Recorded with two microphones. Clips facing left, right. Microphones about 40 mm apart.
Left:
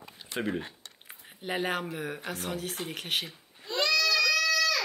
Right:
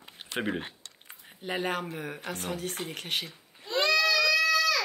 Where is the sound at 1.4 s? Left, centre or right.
Centre.